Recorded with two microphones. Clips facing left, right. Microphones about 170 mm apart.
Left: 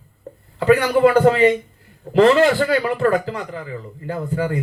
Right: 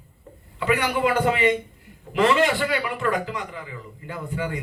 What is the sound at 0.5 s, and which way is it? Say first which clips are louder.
Speech: left 8 dB; 40° left (ahead or behind).